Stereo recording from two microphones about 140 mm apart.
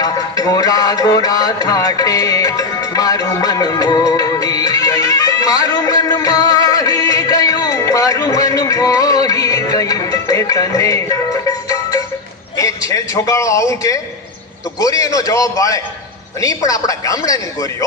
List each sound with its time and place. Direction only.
0.0 s music: 25° left (ahead or behind)
12.5 s a man's voice: 25° left (ahead or behind)